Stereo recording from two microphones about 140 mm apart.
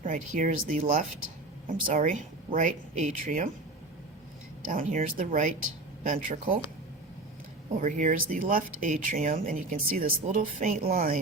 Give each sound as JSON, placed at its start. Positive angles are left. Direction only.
{"t": 0.0, "sound": "speech", "side_deg": -65}
{"t": 4.7, "sound": "speech", "side_deg": -80}
{"t": 7.8, "sound": "speech", "side_deg": -65}